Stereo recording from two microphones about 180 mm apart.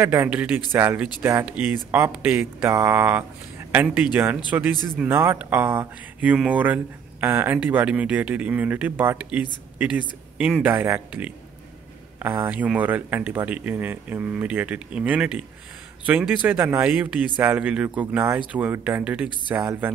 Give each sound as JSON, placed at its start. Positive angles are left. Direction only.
{"t": 0.0, "sound": "speech", "side_deg": -10}